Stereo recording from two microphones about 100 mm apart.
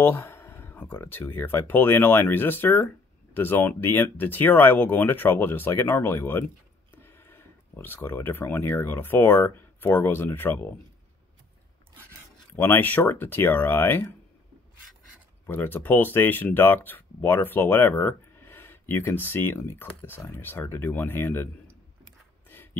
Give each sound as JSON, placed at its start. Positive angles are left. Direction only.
{"t": 0.0, "sound": "speech", "side_deg": 20}
{"t": 12.5, "sound": "speech", "side_deg": 20}
{"t": 15.4, "sound": "speech", "side_deg": 20}